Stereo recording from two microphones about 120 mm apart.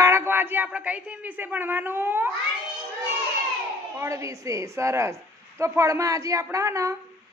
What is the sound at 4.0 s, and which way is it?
A woman's voice, 25° right (ahead or behind).